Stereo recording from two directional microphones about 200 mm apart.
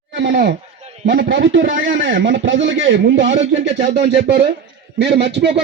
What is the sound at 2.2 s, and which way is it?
Speech, 70° right (ahead or behind).